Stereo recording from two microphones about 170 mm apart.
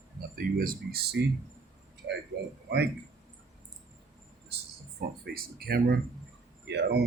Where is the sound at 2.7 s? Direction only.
75° right (ahead or behind).